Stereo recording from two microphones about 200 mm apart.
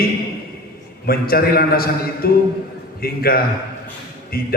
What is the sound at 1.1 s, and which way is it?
A man's voice, 50° left (ahead or behind).